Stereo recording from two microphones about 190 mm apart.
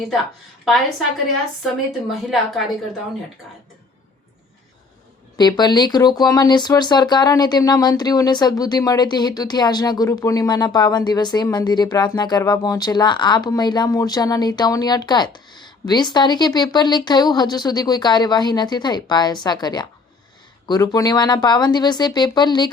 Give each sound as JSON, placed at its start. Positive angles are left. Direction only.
{"t": 0.6, "sound": "a woman's voice", "side_deg": 0}
{"t": 5.4, "sound": "speech", "side_deg": 20}